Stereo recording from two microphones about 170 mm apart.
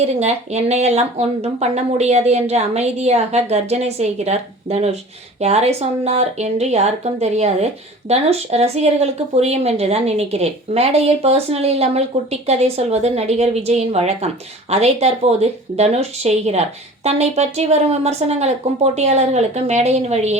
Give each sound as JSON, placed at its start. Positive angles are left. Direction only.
{"t": 0.0, "sound": "speech", "side_deg": -40}